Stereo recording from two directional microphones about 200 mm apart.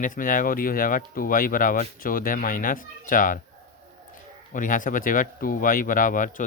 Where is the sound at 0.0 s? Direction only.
40° left (ahead or behind).